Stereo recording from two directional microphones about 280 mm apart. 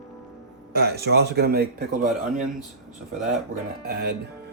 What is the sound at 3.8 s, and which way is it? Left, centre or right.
Speech, right.